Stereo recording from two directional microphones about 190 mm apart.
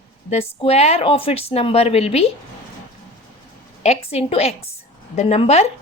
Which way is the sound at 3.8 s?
30° left (ahead or behind).